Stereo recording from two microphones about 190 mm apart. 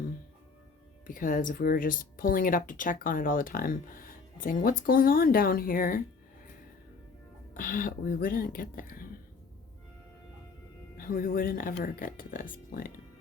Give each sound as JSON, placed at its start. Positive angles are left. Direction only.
{"t": 1.0, "sound": "speech", "side_deg": 45}
{"t": 7.5, "sound": "speech", "side_deg": 50}
{"t": 10.9, "sound": "speech", "side_deg": 50}